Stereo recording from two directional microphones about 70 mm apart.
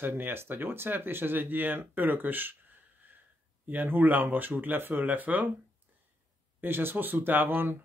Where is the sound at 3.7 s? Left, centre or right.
Right.